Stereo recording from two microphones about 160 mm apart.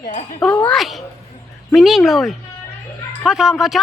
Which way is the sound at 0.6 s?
5° left (ahead or behind).